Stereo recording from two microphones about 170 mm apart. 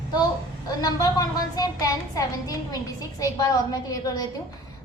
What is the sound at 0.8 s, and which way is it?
A woman's voice, 20° left (ahead or behind).